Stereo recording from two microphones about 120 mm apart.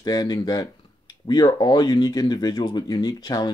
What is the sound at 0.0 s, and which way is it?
Speech, 35° left (ahead or behind).